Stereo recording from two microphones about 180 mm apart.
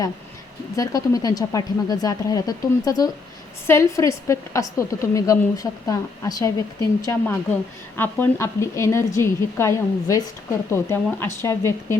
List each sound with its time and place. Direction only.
0.8 s a woman's voice: 20° left (ahead or behind)